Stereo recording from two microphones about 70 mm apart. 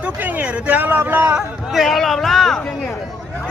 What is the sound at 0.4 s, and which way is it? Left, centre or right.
Speech, right.